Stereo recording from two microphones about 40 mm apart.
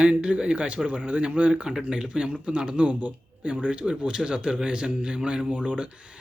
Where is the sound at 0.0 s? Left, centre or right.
Right.